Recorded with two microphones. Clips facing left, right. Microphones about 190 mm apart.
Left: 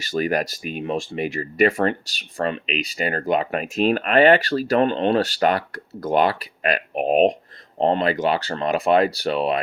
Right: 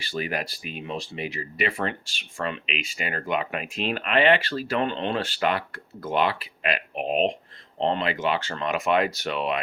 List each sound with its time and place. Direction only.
0.0 s speech: 45° left (ahead or behind)